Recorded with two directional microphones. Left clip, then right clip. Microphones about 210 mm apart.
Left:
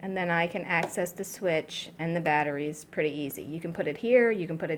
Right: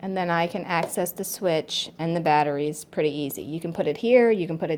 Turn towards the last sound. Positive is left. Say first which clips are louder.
# right 5 dB
turn(degrees=-25)  # may be behind; listen again after turning